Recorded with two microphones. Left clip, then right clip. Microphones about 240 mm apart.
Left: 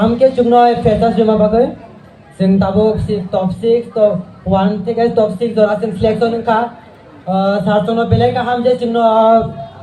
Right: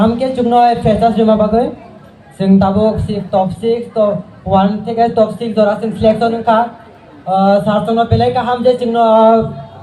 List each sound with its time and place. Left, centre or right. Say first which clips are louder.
0.0 s speech: left 3 dB; right